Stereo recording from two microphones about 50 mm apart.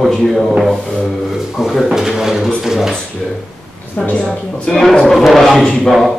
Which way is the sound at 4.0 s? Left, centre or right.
Left.